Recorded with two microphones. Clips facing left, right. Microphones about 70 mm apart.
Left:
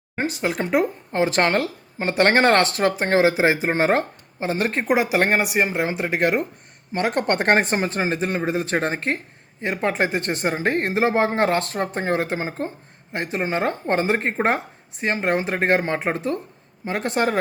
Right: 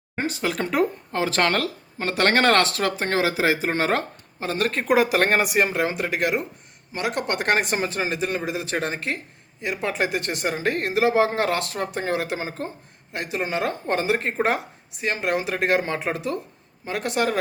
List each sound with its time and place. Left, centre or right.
0.4 s a woman's voice: left
4.9 s speech: centre
5.7 s a woman's voice: left